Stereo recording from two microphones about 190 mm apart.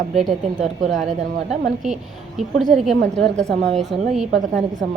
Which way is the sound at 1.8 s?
Centre (ahead or behind).